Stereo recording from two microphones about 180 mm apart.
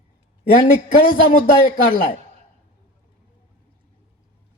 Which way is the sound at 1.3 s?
50° left (ahead or behind).